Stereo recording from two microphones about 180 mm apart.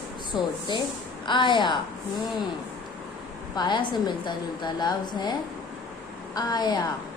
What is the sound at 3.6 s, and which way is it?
A woman's voice, 25° left (ahead or behind).